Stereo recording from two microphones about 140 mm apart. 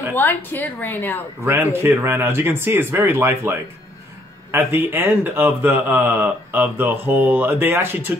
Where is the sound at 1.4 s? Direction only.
15° right (ahead or behind).